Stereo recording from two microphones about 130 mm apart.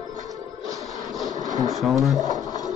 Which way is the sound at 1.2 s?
30° right (ahead or behind).